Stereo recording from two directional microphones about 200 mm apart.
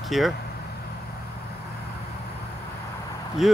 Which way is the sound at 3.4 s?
Centre (ahead or behind).